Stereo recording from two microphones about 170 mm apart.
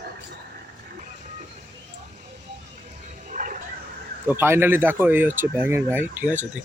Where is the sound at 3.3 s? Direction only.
50° right (ahead or behind).